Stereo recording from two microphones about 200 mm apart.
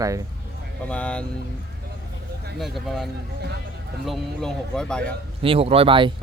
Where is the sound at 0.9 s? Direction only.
5° left (ahead or behind).